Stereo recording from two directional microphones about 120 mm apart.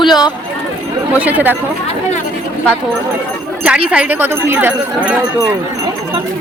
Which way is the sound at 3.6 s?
10° right (ahead or behind).